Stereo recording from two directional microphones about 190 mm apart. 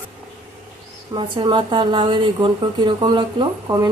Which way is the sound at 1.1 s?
25° right (ahead or behind).